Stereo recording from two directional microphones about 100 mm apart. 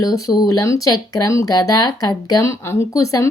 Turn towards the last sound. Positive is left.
turn(degrees=35)  # may be behind; listen again after turning